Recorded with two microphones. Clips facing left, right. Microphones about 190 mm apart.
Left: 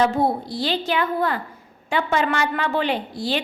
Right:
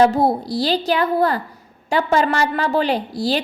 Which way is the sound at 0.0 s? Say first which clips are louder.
Right 4 dB; 40° right (ahead or behind).